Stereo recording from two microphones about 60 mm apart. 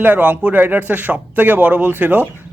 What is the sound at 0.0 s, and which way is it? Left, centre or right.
Speech, right.